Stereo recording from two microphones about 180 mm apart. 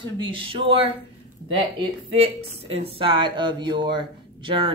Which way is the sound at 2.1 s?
35° right (ahead or behind).